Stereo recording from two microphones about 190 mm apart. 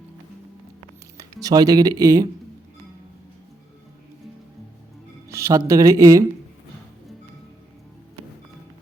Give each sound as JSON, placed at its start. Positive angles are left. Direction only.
{"t": 1.1, "sound": "speech", "side_deg": -20}
{"t": 5.3, "sound": "speech", "side_deg": -15}